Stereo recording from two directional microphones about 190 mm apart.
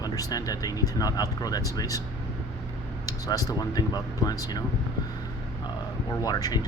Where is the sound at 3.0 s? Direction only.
20° left (ahead or behind).